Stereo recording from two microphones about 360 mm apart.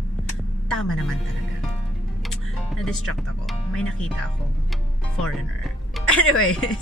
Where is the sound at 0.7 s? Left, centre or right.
Centre.